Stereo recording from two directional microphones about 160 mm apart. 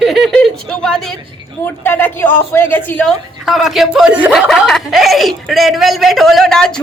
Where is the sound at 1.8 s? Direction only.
15° left (ahead or behind).